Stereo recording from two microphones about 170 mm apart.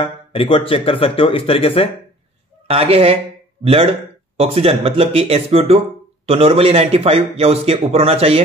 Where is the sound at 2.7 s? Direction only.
35° right (ahead or behind).